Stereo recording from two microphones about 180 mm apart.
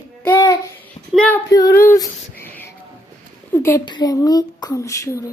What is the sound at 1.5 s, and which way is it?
Speech, 20° left (ahead or behind).